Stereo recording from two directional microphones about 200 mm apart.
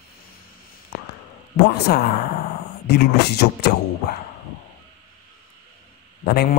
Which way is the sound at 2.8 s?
55° left (ahead or behind).